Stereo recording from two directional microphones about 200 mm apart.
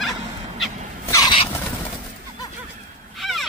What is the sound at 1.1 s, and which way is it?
Wild animals, 20° left (ahead or behind).